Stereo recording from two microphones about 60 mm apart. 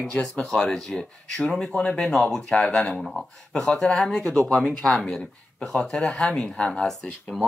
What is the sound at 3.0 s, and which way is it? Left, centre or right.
Speech, centre.